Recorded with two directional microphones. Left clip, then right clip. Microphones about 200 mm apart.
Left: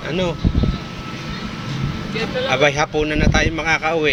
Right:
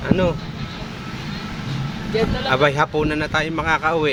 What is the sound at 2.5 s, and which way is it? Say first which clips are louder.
Speech: left 1 dB; 25° right (ahead or behind).